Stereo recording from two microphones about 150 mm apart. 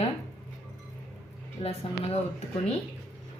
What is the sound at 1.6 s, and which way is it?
Speech, 40° left (ahead or behind).